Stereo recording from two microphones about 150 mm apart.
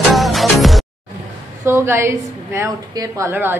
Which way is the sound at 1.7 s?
15° right (ahead or behind).